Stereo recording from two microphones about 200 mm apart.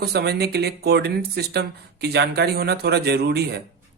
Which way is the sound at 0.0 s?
55° right (ahead or behind).